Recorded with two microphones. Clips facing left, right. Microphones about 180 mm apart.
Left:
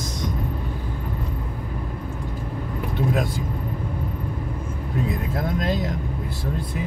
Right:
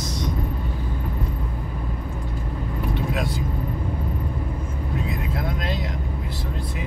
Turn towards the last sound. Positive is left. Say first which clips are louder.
# left 4 dB
turn(degrees=45)  # may be behind; listen again after turning